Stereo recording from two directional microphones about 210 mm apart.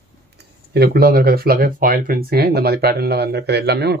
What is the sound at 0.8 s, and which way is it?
Speech, 45° right (ahead or behind).